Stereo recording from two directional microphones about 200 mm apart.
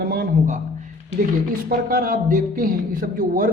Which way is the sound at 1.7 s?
45° right (ahead or behind).